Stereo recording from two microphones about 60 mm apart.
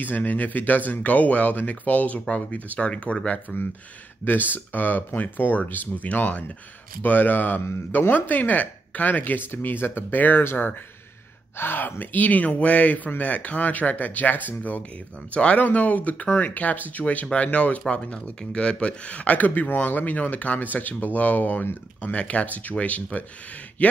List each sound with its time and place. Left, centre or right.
0.0 s speech: left